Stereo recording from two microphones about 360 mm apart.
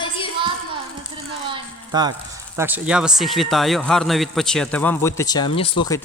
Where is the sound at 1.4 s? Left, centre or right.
Centre.